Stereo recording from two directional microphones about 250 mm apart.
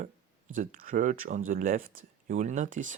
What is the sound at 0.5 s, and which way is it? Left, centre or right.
Speech, right.